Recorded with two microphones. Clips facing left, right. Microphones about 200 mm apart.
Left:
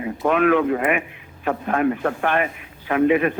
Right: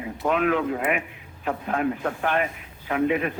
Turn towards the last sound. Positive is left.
turn(degrees=65)  # may be behind; listen again after turning